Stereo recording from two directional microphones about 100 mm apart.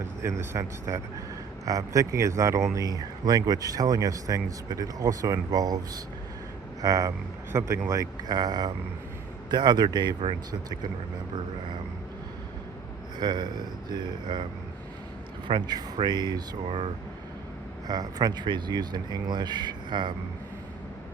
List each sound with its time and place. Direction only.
0.2 s speech: 30° right (ahead or behind)
6.8 s speech: 35° right (ahead or behind)
13.1 s speech: 45° right (ahead or behind)
15.4 s speech: 50° right (ahead or behind)
16.6 s speech: 70° right (ahead or behind)
17.8 s speech: 40° right (ahead or behind)